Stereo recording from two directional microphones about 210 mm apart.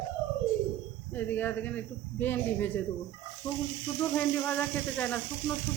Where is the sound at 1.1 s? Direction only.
10° left (ahead or behind).